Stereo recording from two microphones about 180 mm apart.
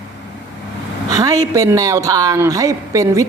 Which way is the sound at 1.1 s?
20° right (ahead or behind).